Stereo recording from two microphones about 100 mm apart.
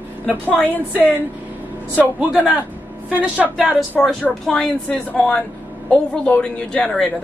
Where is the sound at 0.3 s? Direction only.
15° right (ahead or behind).